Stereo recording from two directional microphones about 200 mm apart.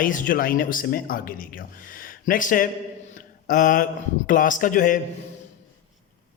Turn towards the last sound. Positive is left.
turn(degrees=40)  # may be behind; listen again after turning